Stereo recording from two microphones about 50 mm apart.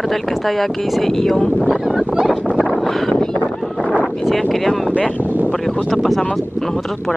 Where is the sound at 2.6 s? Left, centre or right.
Centre.